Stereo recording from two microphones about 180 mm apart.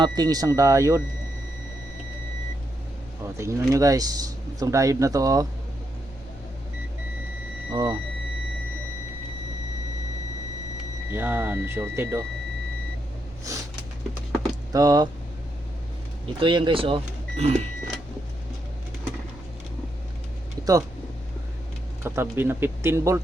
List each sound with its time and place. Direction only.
0.0 s speech: 20° right (ahead or behind)
3.3 s speech: 15° right (ahead or behind)
7.7 s speech: 20° right (ahead or behind)
11.1 s speech: 10° right (ahead or behind)
13.5 s a sound: 15° right (ahead or behind)
14.7 s speech: 20° right (ahead or behind)
16.2 s speech: 25° right (ahead or behind)
22.0 s speech: 15° right (ahead or behind)